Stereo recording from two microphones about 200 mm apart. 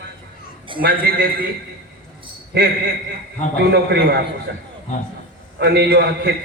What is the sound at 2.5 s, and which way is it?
A man's voice, 55° right (ahead or behind).